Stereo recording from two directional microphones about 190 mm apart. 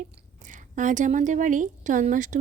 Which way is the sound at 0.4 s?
40° right (ahead or behind).